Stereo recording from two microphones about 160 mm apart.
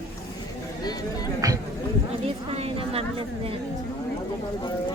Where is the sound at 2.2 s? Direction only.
40° right (ahead or behind).